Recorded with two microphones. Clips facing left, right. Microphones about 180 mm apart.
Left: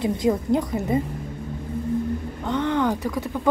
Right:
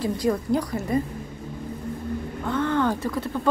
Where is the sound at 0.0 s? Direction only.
20° left (ahead or behind).